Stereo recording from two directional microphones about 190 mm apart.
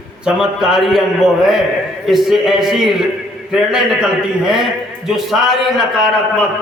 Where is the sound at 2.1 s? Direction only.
Centre (ahead or behind).